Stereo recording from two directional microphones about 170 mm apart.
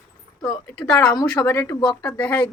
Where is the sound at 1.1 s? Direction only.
20° left (ahead or behind).